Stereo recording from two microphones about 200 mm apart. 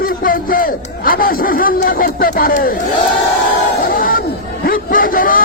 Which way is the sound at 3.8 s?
45° left (ahead or behind).